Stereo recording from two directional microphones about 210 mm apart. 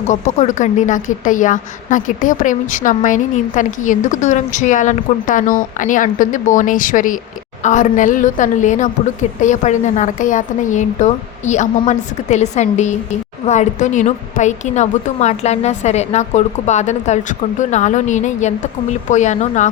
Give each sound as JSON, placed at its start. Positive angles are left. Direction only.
{"t": 0.1, "sound": "a woman's voice", "side_deg": 35}